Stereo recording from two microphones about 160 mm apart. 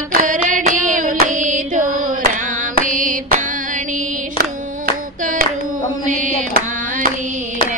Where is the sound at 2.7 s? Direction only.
55° right (ahead or behind).